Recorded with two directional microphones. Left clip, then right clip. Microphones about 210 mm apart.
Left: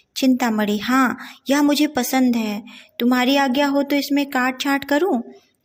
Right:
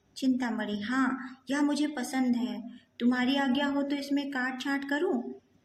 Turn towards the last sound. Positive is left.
turn(degrees=35)  # may be behind; listen again after turning